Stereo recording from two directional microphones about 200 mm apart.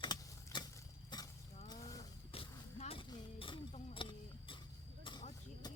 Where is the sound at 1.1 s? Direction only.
20° left (ahead or behind).